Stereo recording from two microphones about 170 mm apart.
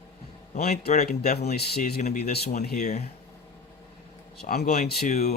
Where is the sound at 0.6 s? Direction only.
65° left (ahead or behind).